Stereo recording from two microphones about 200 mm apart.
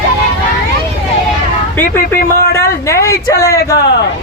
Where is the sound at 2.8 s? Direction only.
15° left (ahead or behind).